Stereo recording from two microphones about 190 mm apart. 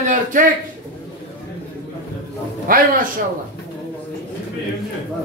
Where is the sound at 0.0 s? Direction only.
40° right (ahead or behind).